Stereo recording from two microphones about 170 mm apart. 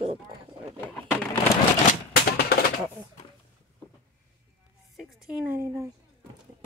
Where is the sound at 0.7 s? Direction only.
10° left (ahead or behind).